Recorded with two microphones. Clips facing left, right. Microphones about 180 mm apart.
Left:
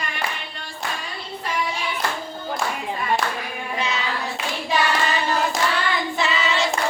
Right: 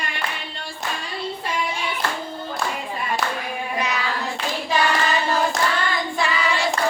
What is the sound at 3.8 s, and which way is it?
Child singing, 25° left (ahead or behind).